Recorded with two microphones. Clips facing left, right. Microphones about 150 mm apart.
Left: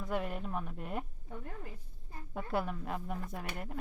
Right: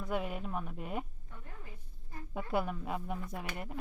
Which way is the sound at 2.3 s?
5° right (ahead or behind).